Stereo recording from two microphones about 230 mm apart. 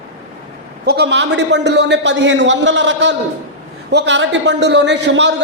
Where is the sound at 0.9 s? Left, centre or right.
Right.